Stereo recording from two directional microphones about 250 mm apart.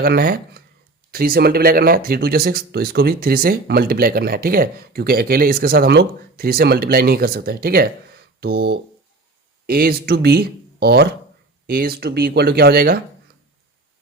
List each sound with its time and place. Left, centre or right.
0.0 s speech: right